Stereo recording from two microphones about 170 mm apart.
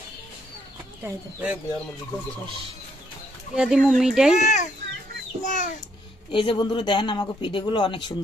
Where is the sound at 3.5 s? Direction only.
Centre (ahead or behind).